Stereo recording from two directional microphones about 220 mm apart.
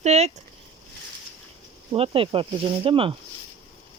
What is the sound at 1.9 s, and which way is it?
Speech, 25° right (ahead or behind).